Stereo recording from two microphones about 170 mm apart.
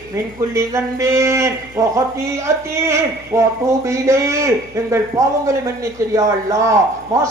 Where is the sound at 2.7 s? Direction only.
15° right (ahead or behind).